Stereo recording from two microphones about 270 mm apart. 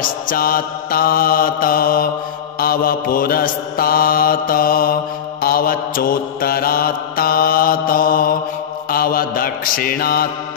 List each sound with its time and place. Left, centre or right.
0.0 s mantra: left